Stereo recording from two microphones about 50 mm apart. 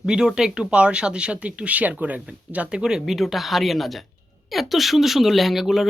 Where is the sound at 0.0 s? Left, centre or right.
Centre; by 2.6 s right.